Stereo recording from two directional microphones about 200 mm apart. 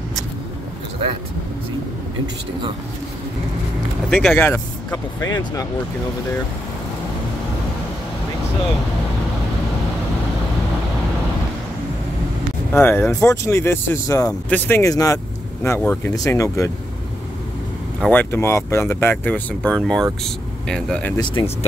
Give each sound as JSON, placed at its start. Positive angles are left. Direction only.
{"t": 4.1, "sound": "speech", "side_deg": 0}
{"t": 12.7, "sound": "speech", "side_deg": 10}
{"t": 18.0, "sound": "speech", "side_deg": 10}
{"t": 21.4, "sound": "speech", "side_deg": 20}